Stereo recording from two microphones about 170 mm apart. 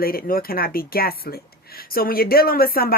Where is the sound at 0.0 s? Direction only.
60° left (ahead or behind).